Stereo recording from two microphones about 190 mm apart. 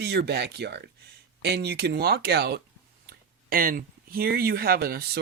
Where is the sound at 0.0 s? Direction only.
60° right (ahead or behind).